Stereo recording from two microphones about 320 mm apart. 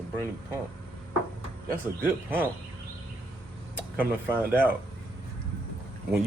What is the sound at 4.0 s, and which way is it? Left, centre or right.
Speech, centre.